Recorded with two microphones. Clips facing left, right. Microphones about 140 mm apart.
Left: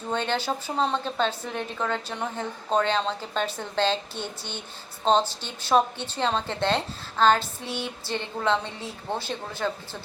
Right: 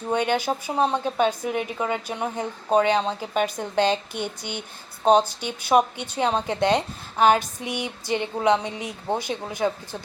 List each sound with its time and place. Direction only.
0.1 s speech: 15° right (ahead or behind)